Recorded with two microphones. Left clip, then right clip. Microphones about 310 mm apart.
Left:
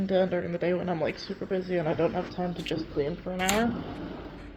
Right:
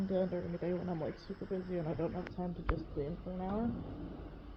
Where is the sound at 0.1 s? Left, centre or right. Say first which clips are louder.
Left 11 dB; left.